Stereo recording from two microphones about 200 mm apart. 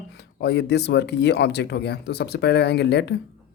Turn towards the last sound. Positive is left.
turn(degrees=60)  # may be behind; listen again after turning